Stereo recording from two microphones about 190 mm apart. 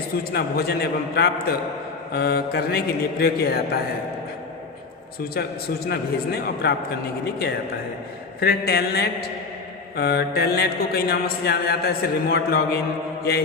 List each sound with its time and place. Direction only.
0.3 s a man's voice: 55° left (ahead or behind)
5.3 s a man's voice: 55° left (ahead or behind)
8.4 s a man's voice: 55° left (ahead or behind)